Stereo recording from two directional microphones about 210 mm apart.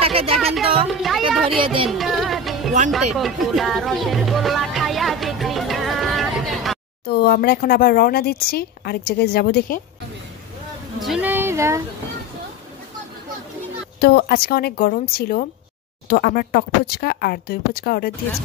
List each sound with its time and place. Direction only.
0.0 s speech: 25° right (ahead or behind)
0.4 s speech: centre (ahead or behind)
1.6 s music: 25° right (ahead or behind)
1.9 s music: centre (ahead or behind)
7.1 s speech: 50° left (ahead or behind)
11.0 s speech: 5° right (ahead or behind)
13.9 s speech: 50° left (ahead or behind)